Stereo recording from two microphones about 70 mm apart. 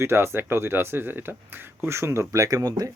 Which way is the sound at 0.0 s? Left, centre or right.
Right.